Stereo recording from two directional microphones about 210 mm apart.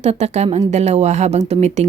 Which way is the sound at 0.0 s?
30° right (ahead or behind).